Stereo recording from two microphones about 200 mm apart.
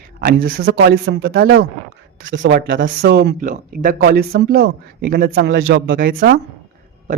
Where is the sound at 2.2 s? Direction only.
70° right (ahead or behind); by 5.6 s 50° right (ahead or behind).